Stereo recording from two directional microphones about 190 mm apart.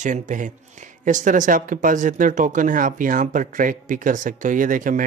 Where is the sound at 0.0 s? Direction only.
40° right (ahead or behind).